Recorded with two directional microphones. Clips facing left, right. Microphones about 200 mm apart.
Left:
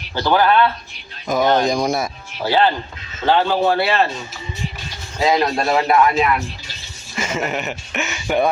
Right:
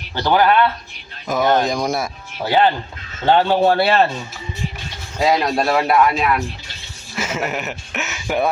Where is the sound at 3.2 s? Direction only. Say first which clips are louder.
Right 2 dB; 35° right (ahead or behind).